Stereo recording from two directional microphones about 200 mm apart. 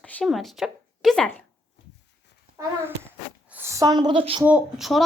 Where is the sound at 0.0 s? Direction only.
5° left (ahead or behind).